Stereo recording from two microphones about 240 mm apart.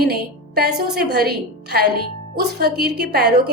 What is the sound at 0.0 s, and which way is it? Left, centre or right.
A woman's voice, right.